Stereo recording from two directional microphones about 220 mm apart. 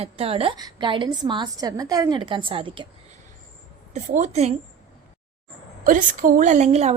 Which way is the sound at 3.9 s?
30° right (ahead or behind).